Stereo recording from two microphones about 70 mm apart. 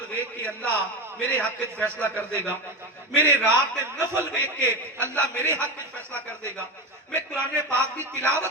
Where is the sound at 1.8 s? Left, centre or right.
Right.